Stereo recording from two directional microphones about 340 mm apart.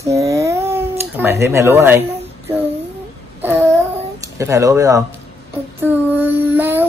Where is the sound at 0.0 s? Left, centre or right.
Centre.